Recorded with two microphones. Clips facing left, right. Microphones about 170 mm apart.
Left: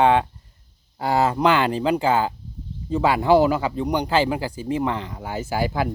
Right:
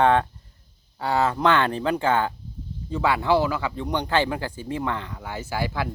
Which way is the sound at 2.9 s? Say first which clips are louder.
Left 3 dB; 20° left (ahead or behind).